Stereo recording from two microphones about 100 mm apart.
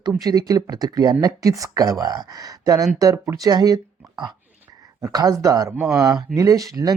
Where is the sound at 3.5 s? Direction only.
40° right (ahead or behind).